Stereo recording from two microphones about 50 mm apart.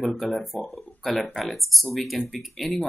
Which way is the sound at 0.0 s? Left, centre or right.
Centre.